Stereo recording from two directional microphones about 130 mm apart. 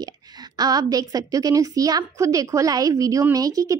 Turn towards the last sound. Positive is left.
turn(degrees=-30)  # may be behind; listen again after turning